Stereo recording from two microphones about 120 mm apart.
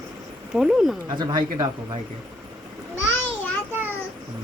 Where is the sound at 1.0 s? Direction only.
35° right (ahead or behind).